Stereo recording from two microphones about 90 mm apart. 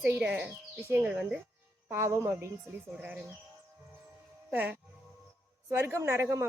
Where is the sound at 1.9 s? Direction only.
30° right (ahead or behind).